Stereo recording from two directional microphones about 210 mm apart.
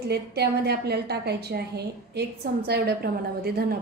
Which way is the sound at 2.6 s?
50° right (ahead or behind).